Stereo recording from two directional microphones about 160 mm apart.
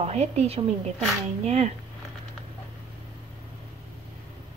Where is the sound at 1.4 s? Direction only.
45° right (ahead or behind).